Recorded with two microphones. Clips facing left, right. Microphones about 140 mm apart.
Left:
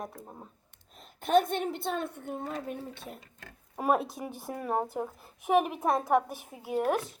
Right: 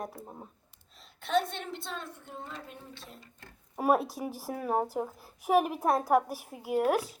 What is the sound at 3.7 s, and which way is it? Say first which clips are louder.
A child's voice: right 1 dB; centre (ahead or behind).